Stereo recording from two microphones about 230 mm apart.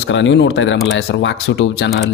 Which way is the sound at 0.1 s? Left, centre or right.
Left.